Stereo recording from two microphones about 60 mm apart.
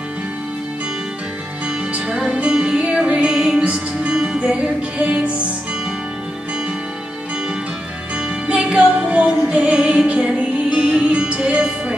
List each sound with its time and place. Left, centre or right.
2.0 s music: centre
8.5 s music: centre